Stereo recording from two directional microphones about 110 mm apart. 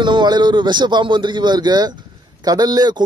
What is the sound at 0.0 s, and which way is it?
A man's voice, 45° right (ahead or behind).